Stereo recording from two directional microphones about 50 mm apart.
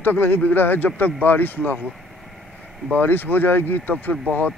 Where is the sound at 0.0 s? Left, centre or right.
Left.